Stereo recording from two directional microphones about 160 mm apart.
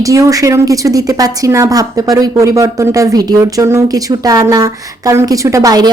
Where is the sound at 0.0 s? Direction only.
20° right (ahead or behind).